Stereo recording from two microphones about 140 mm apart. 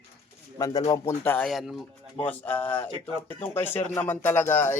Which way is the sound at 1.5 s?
Centre (ahead or behind).